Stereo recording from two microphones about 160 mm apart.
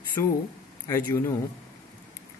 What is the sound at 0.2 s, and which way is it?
A man's voice, 20° left (ahead or behind).